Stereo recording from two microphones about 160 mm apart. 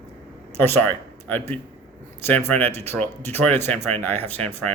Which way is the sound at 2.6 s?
15° left (ahead or behind).